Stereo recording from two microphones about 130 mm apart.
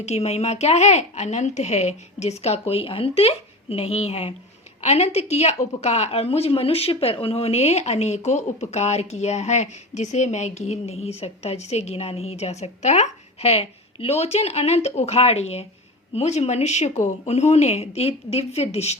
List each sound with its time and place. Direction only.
0.0 s speech: 55° left (ahead or behind)